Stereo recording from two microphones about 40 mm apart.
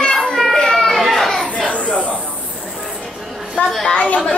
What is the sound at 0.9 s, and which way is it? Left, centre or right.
Children playing, centre.